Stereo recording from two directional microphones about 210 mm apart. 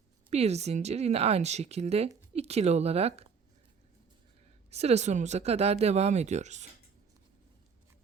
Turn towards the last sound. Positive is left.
turn(degrees=-35)  # may be behind; listen again after turning